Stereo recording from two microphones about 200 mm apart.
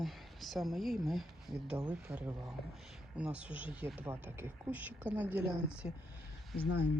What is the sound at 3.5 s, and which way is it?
Speech, 25° left (ahead or behind).